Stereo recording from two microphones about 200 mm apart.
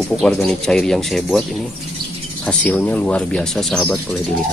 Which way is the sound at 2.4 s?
5° left (ahead or behind).